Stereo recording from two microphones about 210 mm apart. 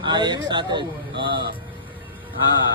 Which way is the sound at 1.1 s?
55° right (ahead or behind).